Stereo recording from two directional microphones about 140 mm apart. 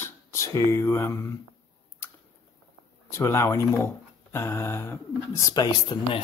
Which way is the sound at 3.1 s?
20° left (ahead or behind).